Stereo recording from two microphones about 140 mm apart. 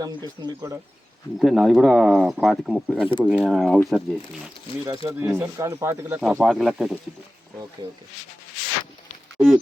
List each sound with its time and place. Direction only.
0.0 s speech: 30° right (ahead or behind)
1.4 s speech: centre (ahead or behind)
5.0 s speech: 15° right (ahead or behind)
9.4 s speech: 20° right (ahead or behind)